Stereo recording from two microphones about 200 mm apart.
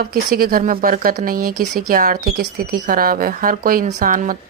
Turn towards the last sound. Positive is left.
turn(degrees=-40)  # may be behind; listen again after turning